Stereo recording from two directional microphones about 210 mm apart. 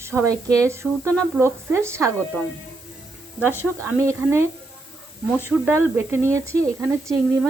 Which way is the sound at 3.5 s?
10° right (ahead or behind).